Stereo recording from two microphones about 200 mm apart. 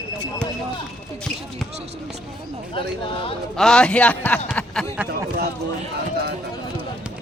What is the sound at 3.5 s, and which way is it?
Speech, 5° left (ahead or behind).